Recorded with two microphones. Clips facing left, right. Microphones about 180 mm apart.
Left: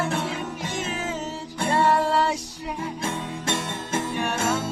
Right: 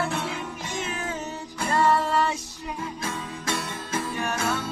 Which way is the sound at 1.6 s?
25° left (ahead or behind).